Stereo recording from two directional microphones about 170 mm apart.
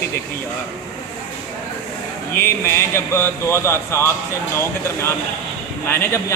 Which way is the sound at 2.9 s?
15° left (ahead or behind).